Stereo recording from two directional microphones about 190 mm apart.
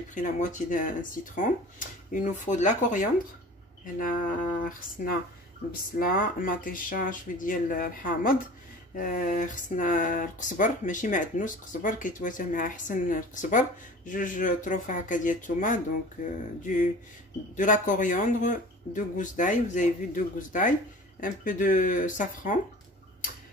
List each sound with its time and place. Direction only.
0.1 s speech: 40° left (ahead or behind)